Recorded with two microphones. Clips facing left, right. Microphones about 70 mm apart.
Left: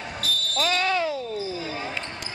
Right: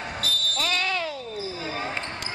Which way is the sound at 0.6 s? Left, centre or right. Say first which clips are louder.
Left 5 dB; centre.